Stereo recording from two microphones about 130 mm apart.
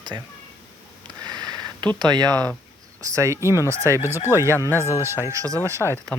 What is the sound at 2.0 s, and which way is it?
Speech, 30° right (ahead or behind).